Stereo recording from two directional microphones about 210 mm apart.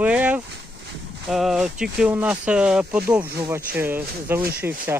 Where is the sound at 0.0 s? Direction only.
5° right (ahead or behind).